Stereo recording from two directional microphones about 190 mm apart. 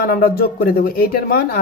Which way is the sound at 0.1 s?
50° left (ahead or behind).